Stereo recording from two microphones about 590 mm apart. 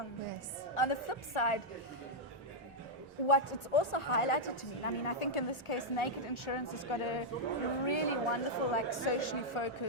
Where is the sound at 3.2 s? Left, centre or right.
Left.